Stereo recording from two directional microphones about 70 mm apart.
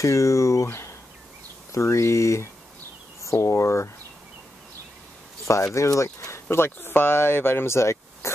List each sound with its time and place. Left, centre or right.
0.0 s speech: left
0.7 s insect: left
1.7 s speech: left
5.8 s speech: left